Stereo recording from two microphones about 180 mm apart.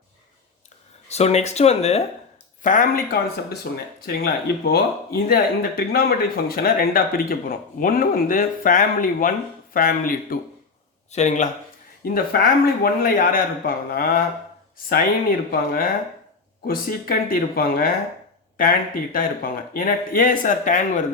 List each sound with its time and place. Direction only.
1.0 s speech: 35° left (ahead or behind)
2.6 s speech: 50° left (ahead or behind)
11.1 s speech: 40° left (ahead or behind)
12.0 s speech: 55° left (ahead or behind)
19.1 s speech: 50° left (ahead or behind)